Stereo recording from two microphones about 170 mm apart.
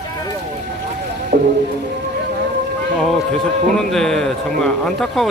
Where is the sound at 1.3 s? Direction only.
50° right (ahead or behind).